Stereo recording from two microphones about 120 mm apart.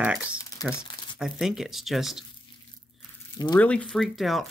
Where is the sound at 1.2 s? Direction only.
5° right (ahead or behind).